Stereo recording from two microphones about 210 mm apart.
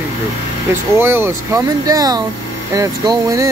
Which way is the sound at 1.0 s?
10° right (ahead or behind).